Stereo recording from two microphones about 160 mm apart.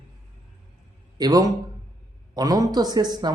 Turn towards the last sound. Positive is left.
turn(degrees=-25)  # may be behind; listen again after turning